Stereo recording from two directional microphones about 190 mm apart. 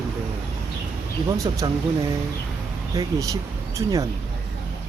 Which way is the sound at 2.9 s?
15° right (ahead or behind).